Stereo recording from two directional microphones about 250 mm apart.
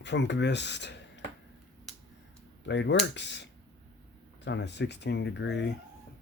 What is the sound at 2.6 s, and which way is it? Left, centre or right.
Speech, left.